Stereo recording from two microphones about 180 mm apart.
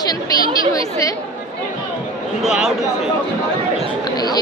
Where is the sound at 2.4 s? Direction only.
Centre (ahead or behind).